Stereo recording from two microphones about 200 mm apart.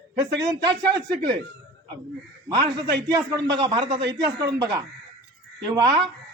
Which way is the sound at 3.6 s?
25° right (ahead or behind).